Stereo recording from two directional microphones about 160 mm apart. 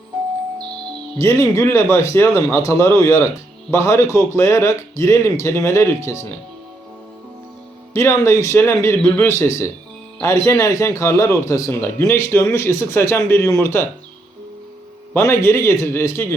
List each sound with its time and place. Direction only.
1.2 s a man's voice: 20° left (ahead or behind)
7.9 s a man's voice: 15° left (ahead or behind)
15.1 s a man's voice: 15° left (ahead or behind)